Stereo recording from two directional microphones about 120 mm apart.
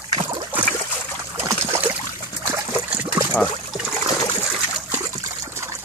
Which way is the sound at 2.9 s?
15° right (ahead or behind).